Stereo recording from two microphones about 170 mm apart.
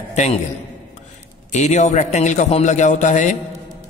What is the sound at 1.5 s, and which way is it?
A man's voice, 45° left (ahead or behind).